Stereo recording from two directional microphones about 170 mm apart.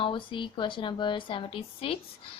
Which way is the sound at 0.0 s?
30° left (ahead or behind).